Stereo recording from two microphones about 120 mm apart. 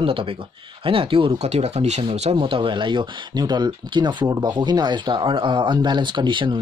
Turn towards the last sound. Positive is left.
turn(degrees=-40)  # may be behind; listen again after turning